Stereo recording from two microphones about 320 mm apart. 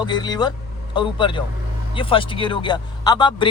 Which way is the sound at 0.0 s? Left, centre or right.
Centre.